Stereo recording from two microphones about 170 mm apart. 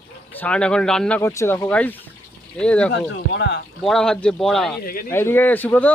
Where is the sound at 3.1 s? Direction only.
90° left.